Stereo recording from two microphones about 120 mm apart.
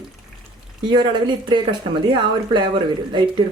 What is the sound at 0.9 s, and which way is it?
Speech, 40° right (ahead or behind).